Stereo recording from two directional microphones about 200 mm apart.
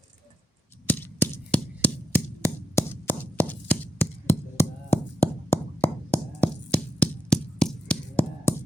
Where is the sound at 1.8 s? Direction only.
10° left (ahead or behind).